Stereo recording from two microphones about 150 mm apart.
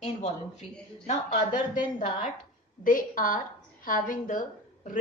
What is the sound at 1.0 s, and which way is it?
A woman's voice, 55° left (ahead or behind).